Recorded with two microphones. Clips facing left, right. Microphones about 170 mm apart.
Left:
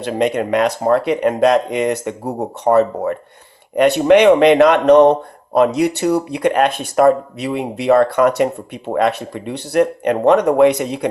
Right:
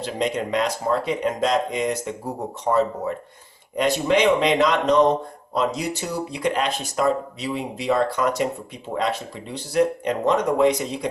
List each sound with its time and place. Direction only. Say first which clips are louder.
0.0 s speech: left 7 dB; 60° left (ahead or behind)